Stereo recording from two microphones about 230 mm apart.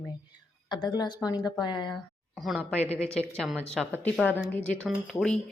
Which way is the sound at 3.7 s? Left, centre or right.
Centre.